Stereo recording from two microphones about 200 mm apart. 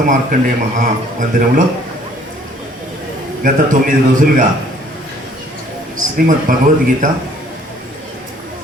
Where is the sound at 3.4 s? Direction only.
45° right (ahead or behind).